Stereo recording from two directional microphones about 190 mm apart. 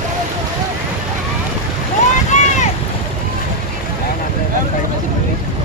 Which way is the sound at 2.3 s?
40° left (ahead or behind).